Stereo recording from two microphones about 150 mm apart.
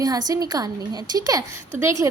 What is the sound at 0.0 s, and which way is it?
A woman's voice, 25° right (ahead or behind).